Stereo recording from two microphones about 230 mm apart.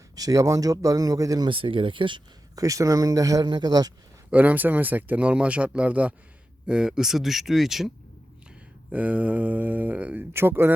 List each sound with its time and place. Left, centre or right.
0.2 s speech: centre
8.9 s speech: centre